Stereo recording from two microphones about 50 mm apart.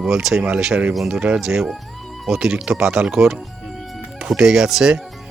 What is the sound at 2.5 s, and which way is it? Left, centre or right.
Speech, centre.